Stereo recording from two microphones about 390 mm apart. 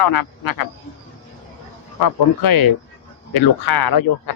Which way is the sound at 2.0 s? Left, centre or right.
Left.